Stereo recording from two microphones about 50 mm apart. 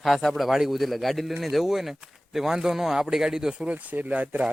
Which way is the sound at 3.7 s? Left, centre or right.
Right.